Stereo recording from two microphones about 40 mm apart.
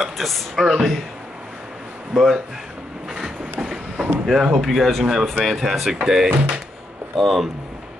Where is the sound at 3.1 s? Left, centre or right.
Centre.